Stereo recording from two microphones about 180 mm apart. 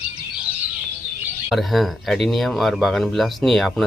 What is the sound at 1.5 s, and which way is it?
Speech, centre (ahead or behind).